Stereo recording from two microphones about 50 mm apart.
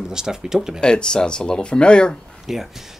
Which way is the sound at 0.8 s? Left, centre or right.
Centre.